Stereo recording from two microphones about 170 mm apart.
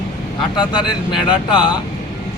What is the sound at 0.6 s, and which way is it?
Speech, 25° left (ahead or behind).